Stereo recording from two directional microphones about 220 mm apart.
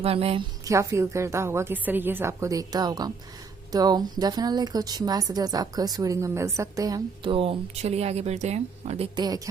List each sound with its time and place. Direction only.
0.0 s a woman's voice: 25° right (ahead or behind)